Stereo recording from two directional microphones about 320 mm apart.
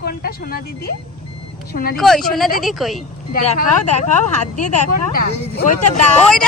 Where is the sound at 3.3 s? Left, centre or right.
Left.